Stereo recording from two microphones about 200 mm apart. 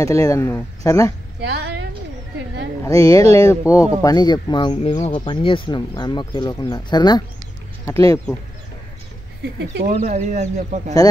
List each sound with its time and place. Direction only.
0.0 s speech: 15° left (ahead or behind)
1.4 s a woman's voice: 55° right (ahead or behind)
2.8 s speech: 15° left (ahead or behind)
9.8 s speech: 35° right (ahead or behind)